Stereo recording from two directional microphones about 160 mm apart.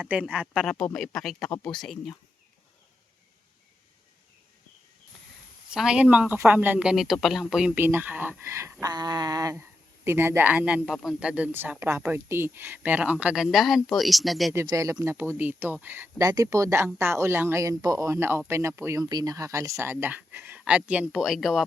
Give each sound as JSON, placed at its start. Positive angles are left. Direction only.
{"t": 0.0, "sound": "speech", "side_deg": -10}
{"t": 0.6, "sound": "speech", "side_deg": 5}
{"t": 5.7, "sound": "speech", "side_deg": -5}
{"t": 14.5, "sound": "speech", "side_deg": -15}